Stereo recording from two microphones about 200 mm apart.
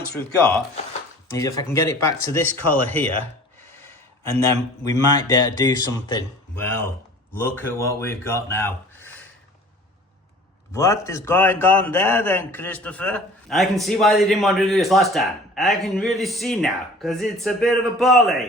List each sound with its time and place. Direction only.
1.3 s speech: 15° left (ahead or behind)
4.3 s speech: 15° left (ahead or behind)
10.7 s a man's voice: 15° left (ahead or behind)